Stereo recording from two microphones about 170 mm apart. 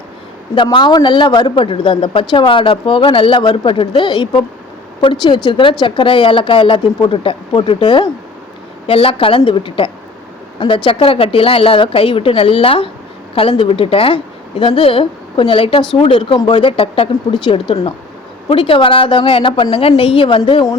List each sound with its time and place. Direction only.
0.5 s a man's voice: 30° left (ahead or behind)
5.5 s a man's voice: 30° left (ahead or behind)